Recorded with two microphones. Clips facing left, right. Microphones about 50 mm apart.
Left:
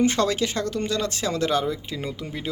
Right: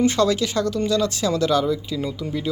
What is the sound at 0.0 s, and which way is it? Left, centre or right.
Speech, left.